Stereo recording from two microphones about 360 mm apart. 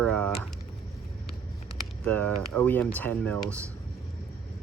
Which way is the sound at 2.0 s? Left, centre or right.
Centre.